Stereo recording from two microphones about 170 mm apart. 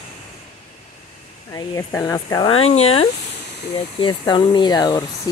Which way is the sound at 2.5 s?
35° left (ahead or behind).